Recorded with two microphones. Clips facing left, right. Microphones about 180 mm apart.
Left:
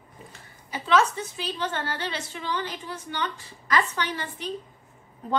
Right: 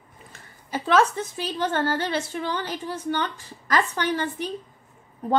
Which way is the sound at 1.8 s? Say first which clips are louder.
Right 7 dB; 45° right (ahead or behind).